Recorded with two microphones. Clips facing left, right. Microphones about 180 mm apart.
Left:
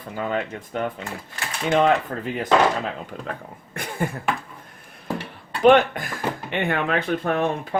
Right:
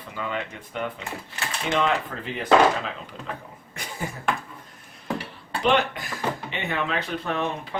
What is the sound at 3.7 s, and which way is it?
Cough, 55° left (ahead or behind).